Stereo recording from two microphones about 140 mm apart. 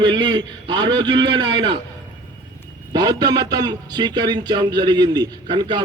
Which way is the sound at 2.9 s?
30° right (ahead or behind).